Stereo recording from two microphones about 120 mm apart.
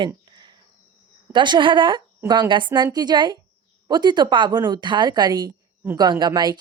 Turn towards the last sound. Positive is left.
turn(degrees=-35)  # may be behind; listen again after turning